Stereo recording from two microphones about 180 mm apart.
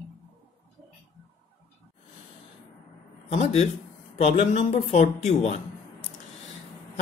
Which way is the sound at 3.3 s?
35° left (ahead or behind).